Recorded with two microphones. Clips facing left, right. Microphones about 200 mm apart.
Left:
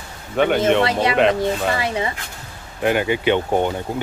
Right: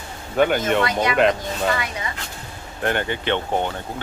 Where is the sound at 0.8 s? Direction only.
30° left (ahead or behind).